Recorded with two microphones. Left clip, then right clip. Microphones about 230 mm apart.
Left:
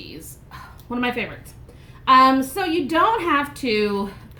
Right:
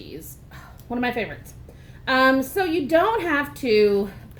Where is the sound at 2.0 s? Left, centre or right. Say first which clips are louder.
Left 5 dB; centre.